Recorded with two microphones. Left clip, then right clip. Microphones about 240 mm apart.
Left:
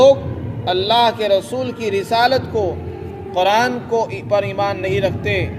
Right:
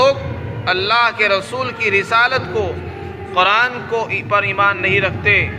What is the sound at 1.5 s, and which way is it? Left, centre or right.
A man's voice, left.